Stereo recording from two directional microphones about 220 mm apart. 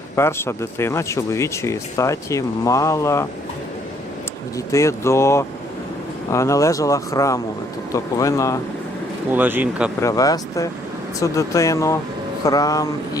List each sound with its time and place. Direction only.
0.2 s speech: 10° left (ahead or behind)
4.5 s speech: 15° left (ahead or behind)
9.3 s speech: 10° right (ahead or behind)
10.0 s speech: 15° left (ahead or behind)